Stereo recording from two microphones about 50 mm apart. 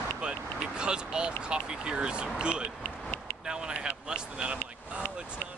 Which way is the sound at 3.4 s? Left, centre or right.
Centre.